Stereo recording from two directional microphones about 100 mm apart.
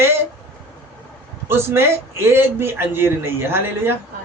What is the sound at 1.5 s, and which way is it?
A man's voice, 25° right (ahead or behind).